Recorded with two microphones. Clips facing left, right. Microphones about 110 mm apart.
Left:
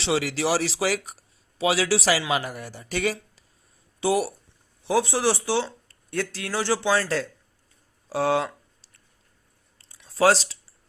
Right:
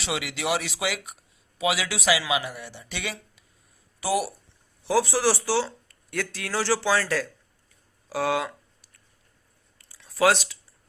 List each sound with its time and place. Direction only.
0.0 s speech: 35° left (ahead or behind)
4.0 s speech: 30° left (ahead or behind)
8.1 s a sound: 30° left (ahead or behind)